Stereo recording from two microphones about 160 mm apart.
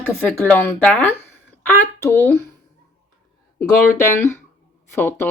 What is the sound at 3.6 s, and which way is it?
Speech, 15° left (ahead or behind).